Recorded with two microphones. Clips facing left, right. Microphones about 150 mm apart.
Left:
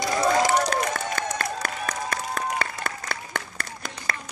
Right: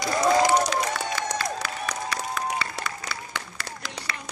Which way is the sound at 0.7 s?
50° left (ahead or behind).